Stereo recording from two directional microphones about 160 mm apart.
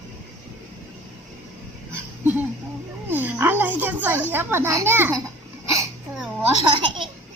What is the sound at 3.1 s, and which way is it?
Speech, 10° right (ahead or behind).